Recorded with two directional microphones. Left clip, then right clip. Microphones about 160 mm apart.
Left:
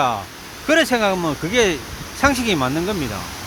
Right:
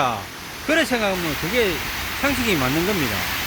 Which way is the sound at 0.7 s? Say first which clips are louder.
Left 4 dB; 40° left (ahead or behind).